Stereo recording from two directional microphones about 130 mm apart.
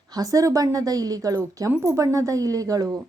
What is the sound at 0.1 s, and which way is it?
A woman's voice, 25° right (ahead or behind).